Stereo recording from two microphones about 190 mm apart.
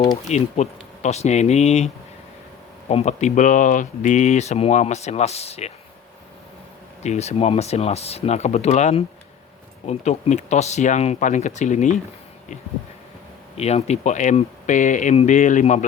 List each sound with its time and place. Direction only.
0.3 s speech: 35° left (ahead or behind)
2.9 s speech: 35° left (ahead or behind)
7.0 s speech: 35° left (ahead or behind)
13.6 s speech: 35° left (ahead or behind)